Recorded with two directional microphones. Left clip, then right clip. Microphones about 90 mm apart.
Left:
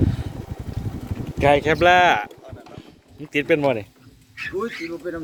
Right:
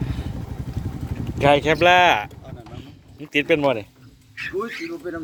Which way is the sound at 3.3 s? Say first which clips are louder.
Even; 15° left (ahead or behind).